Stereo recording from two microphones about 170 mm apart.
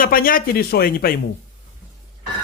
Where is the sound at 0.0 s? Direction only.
55° left (ahead or behind).